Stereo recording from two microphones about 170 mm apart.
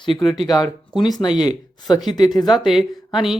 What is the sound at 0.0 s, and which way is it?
Speech, 25° left (ahead or behind).